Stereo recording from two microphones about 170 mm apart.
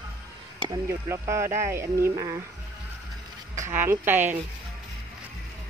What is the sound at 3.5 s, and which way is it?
Speech, 15° right (ahead or behind).